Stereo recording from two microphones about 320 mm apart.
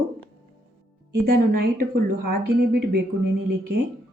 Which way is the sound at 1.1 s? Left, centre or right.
Right.